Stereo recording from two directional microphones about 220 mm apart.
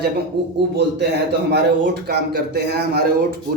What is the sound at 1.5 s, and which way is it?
A man's voice, 50° right (ahead or behind).